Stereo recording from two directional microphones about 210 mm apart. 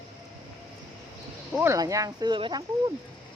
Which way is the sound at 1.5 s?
10° right (ahead or behind).